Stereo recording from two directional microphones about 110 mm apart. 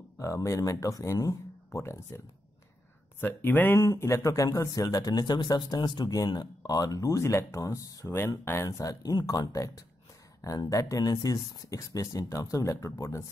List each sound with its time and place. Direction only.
0.2 s speech: 30° left (ahead or behind)
3.8 s speech: 30° left (ahead or behind)